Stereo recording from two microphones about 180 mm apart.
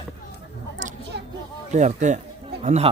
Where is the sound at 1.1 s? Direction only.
70° right (ahead or behind).